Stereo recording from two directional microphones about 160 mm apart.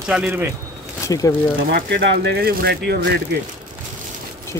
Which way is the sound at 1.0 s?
20° left (ahead or behind).